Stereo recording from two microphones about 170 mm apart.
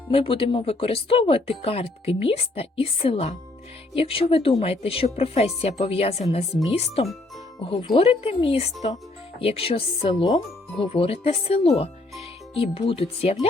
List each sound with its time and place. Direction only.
0.1 s speech: 30° left (ahead or behind)